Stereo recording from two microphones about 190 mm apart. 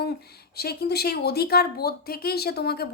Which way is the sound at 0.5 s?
55° left (ahead or behind).